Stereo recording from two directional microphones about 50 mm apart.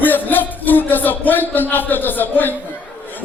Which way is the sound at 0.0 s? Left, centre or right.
Left.